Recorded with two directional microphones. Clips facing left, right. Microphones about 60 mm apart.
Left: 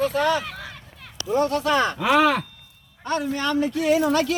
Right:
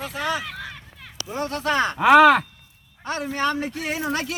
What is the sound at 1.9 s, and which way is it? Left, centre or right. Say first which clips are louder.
Speech: right 9 dB; right.